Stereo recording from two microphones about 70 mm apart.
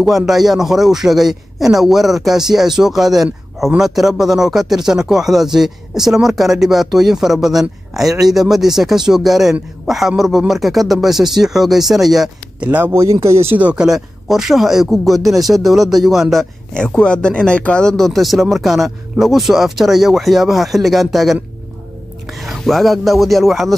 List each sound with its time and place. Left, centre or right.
0.3 s speech: centre
12.5 s speech: right
12.9 s speech: right
13.5 s speech: right
13.7 s speech: centre
16.7 s speech: centre
22.4 s speech: centre